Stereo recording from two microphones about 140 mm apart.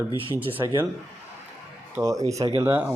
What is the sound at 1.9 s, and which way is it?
Speech, 25° right (ahead or behind).